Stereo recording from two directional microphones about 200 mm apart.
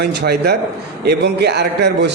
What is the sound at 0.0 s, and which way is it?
A man's voice, 55° right (ahead or behind).